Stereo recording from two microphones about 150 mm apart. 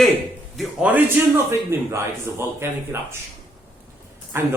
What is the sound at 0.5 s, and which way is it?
A man's voice, 10° right (ahead or behind).